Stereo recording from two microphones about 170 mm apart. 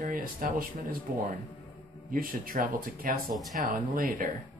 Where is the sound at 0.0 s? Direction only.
55° right (ahead or behind).